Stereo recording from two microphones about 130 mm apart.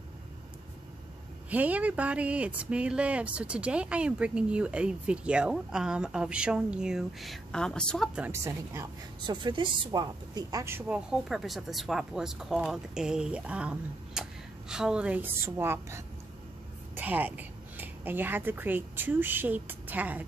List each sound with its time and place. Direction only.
1.5 s speech: 10° right (ahead or behind); by 8.1 s 5° left (ahead or behind)
8.3 s speech: 25° right (ahead or behind)
9.3 s a woman's voice: 35° right (ahead or behind); by 11.0 s 20° right (ahead or behind)
11.1 s a woman's voice: centre (ahead or behind)